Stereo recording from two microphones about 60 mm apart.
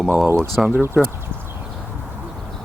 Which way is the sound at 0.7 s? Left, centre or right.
Right.